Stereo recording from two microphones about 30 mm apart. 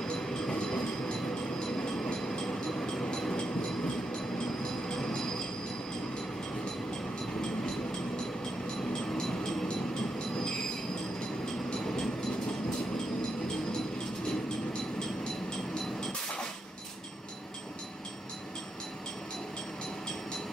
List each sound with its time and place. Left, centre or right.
0.1 s a sound: left
1.8 s train: left
8.9 s vehicle: centre
11.7 s vehicle: left
15.8 s vehicle: centre